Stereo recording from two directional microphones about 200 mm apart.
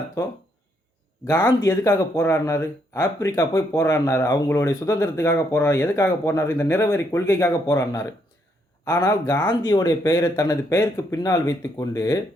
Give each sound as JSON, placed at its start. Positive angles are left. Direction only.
{"t": 1.3, "sound": "speech", "side_deg": 15}